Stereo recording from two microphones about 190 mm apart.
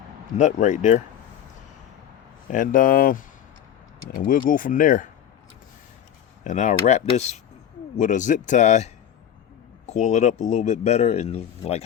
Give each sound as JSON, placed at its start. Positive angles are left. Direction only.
{"t": 0.3, "sound": "speech", "side_deg": 40}
{"t": 2.5, "sound": "speech", "side_deg": 45}
{"t": 6.4, "sound": "speech", "side_deg": 40}